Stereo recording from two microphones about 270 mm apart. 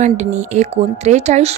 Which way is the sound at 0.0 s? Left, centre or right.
Right.